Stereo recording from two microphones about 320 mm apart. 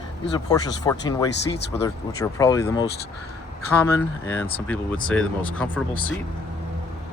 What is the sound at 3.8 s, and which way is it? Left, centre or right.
Speech, centre.